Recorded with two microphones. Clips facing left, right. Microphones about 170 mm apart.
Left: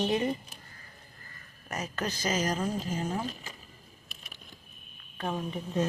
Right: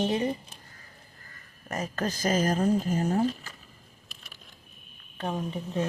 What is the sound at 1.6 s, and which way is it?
Speech, 40° right (ahead or behind).